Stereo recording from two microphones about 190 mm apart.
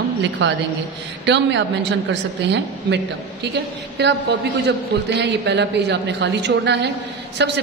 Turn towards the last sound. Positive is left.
turn(degrees=-65)  # may be behind; listen again after turning